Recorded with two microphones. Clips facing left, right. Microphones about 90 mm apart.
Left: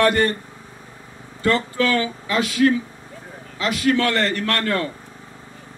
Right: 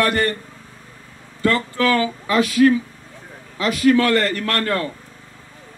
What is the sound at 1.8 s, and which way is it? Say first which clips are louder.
Speech: right 2 dB; 25° right (ahead or behind).